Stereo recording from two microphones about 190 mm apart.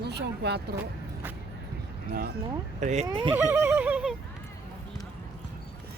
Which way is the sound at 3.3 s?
10° right (ahead or behind).